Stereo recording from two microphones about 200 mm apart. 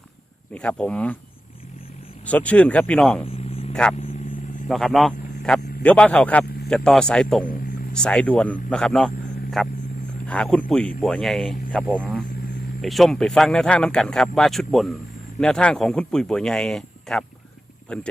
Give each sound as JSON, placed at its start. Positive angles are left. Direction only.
{"t": 0.5, "sound": "speech", "side_deg": 5}
{"t": 2.2, "sound": "speech", "side_deg": 5}
{"t": 3.2, "sound": "vehicle", "side_deg": 30}
{"t": 3.7, "sound": "speech", "side_deg": 5}